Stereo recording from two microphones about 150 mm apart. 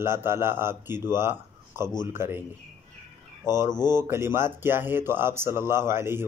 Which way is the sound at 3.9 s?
15° right (ahead or behind).